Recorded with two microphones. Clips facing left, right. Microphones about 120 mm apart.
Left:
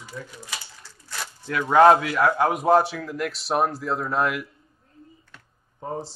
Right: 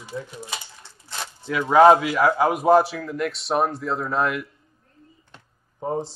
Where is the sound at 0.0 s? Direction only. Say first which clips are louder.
Right 5 dB; 20° right (ahead or behind).